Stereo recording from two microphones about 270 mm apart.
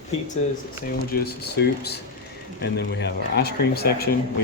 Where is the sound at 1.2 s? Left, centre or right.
Left.